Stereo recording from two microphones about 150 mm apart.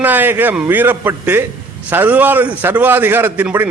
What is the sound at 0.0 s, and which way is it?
Speech, 10° right (ahead or behind).